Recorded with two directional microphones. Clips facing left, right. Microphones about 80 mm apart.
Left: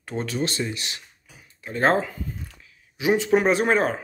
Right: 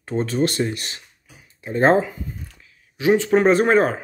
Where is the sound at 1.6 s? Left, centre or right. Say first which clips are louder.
Right 5 dB; right.